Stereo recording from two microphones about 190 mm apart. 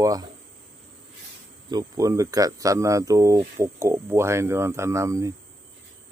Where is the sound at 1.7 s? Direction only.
20° right (ahead or behind).